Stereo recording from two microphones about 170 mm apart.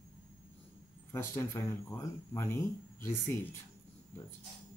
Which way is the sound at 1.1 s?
15° left (ahead or behind).